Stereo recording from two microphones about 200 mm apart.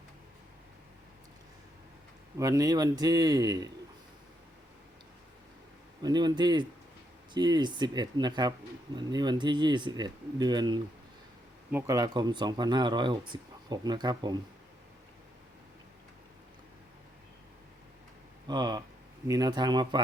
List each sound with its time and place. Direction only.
2.4 s a man's voice: 15° right (ahead or behind)
6.0 s speech: 20° right (ahead or behind)
18.4 s speech: 20° right (ahead or behind)